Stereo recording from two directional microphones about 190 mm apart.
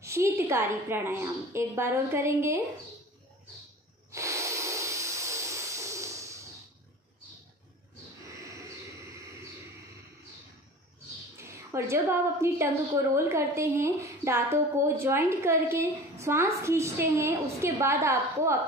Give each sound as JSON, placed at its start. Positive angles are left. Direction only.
{"t": 0.0, "sound": "a woman's voice", "side_deg": -15}
{"t": 4.1, "sound": "hiss", "side_deg": -15}
{"t": 8.5, "sound": "a sound", "side_deg": -15}
{"t": 11.4, "sound": "a woman's voice", "side_deg": -15}